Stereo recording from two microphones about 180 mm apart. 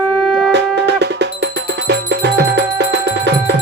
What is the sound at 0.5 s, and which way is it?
Music, 70° right (ahead or behind).